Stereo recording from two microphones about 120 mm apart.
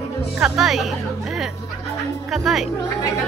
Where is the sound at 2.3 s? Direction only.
Centre (ahead or behind).